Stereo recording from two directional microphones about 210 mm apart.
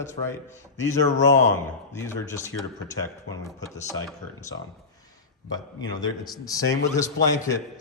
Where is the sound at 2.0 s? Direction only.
15° left (ahead or behind).